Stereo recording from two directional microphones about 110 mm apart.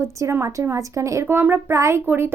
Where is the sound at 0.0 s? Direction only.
25° right (ahead or behind).